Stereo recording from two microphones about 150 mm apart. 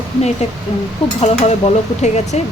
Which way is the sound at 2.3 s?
50° left (ahead or behind).